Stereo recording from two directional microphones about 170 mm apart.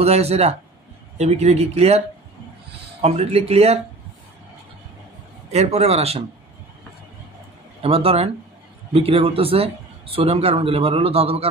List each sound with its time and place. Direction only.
0.0 s a man's voice: 35° right (ahead or behind)
5.5 s a man's voice: 40° right (ahead or behind)
7.8 s a man's voice: 35° right (ahead or behind)